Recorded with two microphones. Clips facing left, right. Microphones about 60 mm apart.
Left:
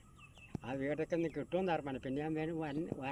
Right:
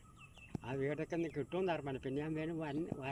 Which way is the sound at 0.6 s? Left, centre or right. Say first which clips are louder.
Left 1 dB; left.